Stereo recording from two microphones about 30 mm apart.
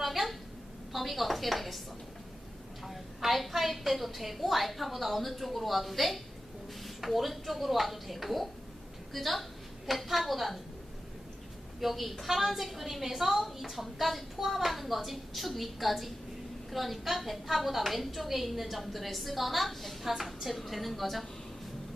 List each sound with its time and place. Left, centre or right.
0.0 s a sound: centre
0.9 s a woman's voice: centre
2.8 s a woman's voice: centre
11.8 s a woman's voice: centre